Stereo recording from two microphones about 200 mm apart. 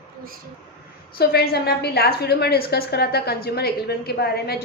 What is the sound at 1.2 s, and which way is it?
A woman's voice, 50° left (ahead or behind).